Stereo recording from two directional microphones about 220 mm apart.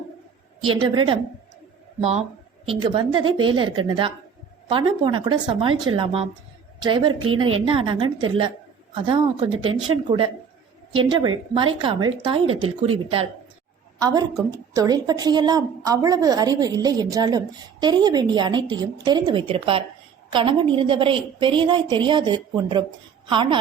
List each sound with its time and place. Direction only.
0.6 s a woman's voice: 20° right (ahead or behind)
14.0 s a woman's voice: 15° right (ahead or behind)